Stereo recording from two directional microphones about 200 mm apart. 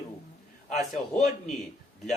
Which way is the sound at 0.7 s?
Centre (ahead or behind).